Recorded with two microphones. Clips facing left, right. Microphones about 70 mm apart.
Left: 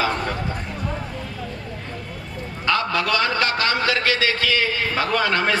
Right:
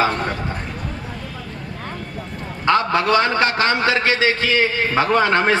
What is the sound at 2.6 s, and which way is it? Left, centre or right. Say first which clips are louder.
Speech: right 5 dB; right.